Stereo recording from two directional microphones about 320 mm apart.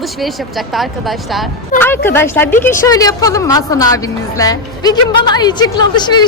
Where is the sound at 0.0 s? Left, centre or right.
Centre.